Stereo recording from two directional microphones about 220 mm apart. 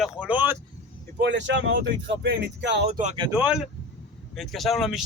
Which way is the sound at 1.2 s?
55° right (ahead or behind).